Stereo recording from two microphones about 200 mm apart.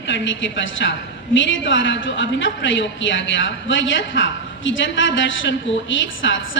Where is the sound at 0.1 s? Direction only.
65° left (ahead or behind).